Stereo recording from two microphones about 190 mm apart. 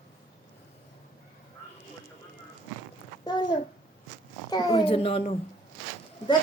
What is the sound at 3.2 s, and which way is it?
A child's voice, 25° left (ahead or behind).